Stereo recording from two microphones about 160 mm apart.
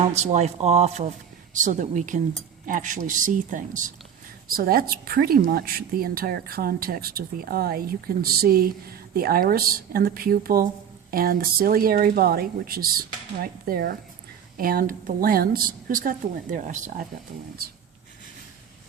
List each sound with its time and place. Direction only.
0.2 s a woman's voice: 45° right (ahead or behind)
4.5 s a woman's voice: 70° right (ahead or behind); by 17.1 s 50° right (ahead or behind)